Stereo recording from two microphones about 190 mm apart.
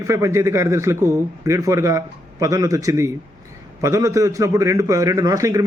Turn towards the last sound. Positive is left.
turn(degrees=-15)  # may be behind; listen again after turning